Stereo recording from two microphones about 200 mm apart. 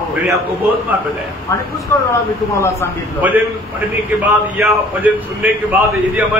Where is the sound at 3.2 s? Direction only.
10° right (ahead or behind).